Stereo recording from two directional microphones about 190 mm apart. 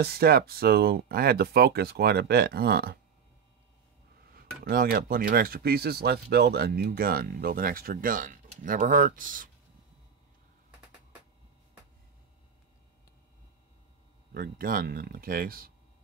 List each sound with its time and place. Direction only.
0.0 s speech: 55° right (ahead or behind)
4.3 s speech: 50° right (ahead or behind)
14.3 s speech: 50° right (ahead or behind)